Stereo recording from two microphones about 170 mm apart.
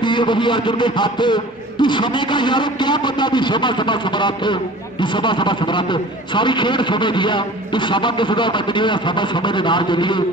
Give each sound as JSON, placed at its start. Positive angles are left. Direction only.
{"t": 0.0, "sound": "a man's voice", "side_deg": 25}